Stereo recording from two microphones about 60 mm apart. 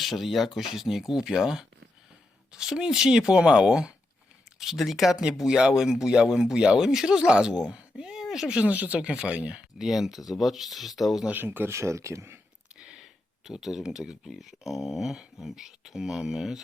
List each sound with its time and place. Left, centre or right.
0.0 s speech: centre
9.7 s speech: centre
11.3 s speech: right
11.7 s speech: right
12.8 s speech: centre